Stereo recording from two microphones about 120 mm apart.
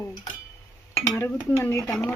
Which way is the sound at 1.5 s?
20° left (ahead or behind).